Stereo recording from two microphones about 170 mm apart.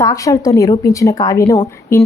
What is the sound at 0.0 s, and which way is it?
A woman's voice, 20° left (ahead or behind).